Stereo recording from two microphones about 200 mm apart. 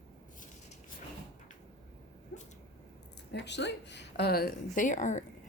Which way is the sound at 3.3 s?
60° left (ahead or behind).